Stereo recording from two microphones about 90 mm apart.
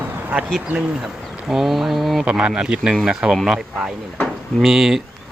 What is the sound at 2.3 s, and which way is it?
Speech, 10° right (ahead or behind).